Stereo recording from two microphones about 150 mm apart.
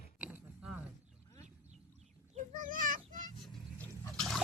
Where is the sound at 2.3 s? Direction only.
60° right (ahead or behind).